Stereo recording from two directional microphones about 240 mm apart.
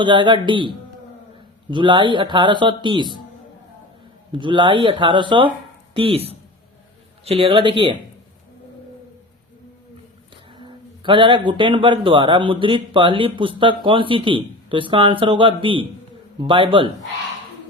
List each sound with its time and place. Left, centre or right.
0.0 s a man's voice: centre
4.3 s a man's voice: centre
10.6 s a man's voice: centre